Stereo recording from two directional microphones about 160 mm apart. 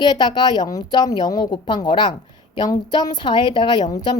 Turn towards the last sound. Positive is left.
turn(degrees=25)  # may be behind; listen again after turning